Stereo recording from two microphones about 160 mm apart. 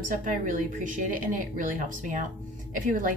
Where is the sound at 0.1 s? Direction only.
55° right (ahead or behind).